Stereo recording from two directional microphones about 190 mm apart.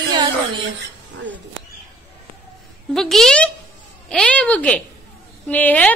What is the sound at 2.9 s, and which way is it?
A woman's voice, centre (ahead or behind).